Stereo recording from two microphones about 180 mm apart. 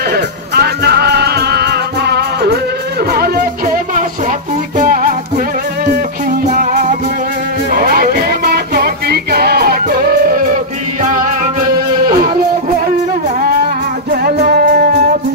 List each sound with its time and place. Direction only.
0.1 s music: 60° right (ahead or behind)
6.4 s music: 45° right (ahead or behind)
14.1 s music: 60° right (ahead or behind)